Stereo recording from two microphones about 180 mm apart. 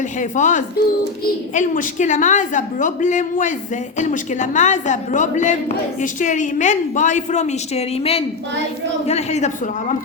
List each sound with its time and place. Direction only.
0.2 s a woman's voice: 45° left (ahead or behind)